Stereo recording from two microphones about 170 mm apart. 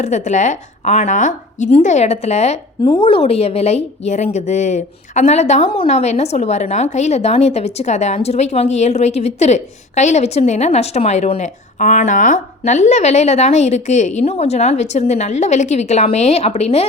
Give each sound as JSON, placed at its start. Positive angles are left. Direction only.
{"t": 0.0, "sound": "a woman's voice", "side_deg": 45}